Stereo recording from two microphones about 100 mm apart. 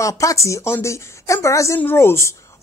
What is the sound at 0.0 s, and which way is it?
Speech, 35° left (ahead or behind).